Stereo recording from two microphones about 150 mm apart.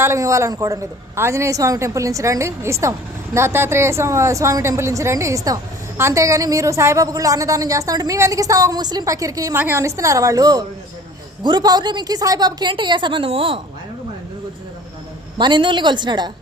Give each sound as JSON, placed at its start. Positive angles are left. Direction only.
{"t": 0.0, "sound": "a woman's voice", "side_deg": -20}
{"t": 15.4, "sound": "a woman's voice", "side_deg": -30}